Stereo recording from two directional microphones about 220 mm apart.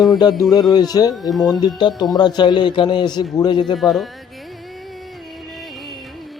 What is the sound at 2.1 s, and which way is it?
A man's voice, 20° left (ahead or behind).